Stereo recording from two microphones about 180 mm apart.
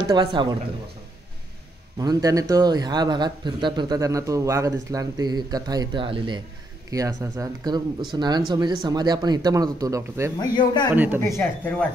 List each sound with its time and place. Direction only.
0.1 s a man's voice: 25° right (ahead or behind)
2.0 s a man's voice: 20° right (ahead or behind)
10.4 s speech: 25° left (ahead or behind)
11.1 s speech: 15° left (ahead or behind)